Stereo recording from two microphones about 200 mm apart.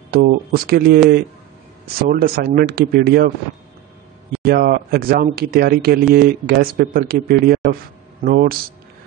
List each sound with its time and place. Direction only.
0.1 s speech: 50° right (ahead or behind)
2.0 s speech: 50° right (ahead or behind)
4.5 s speech: 50° right (ahead or behind)